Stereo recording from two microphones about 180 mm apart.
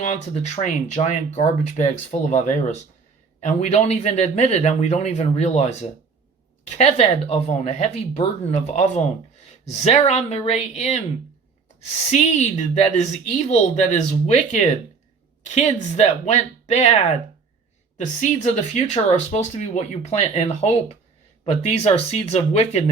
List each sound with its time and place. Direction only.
0.0 s speech: 40° left (ahead or behind)
6.7 s speech: 35° left (ahead or behind)
9.8 s speech: 40° left (ahead or behind)
12.1 s speech: 40° left (ahead or behind)